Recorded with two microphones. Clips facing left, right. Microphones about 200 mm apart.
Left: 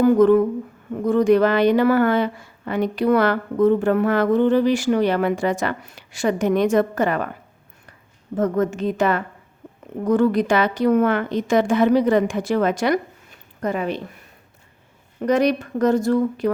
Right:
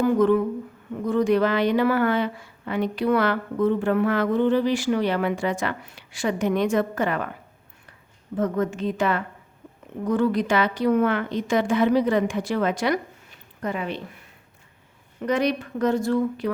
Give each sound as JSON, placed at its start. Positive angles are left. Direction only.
{"t": 0.0, "sound": "a woman's voice", "side_deg": 45}
{"t": 8.4, "sound": "a woman's voice", "side_deg": 45}
{"t": 15.2, "sound": "a woman's voice", "side_deg": 40}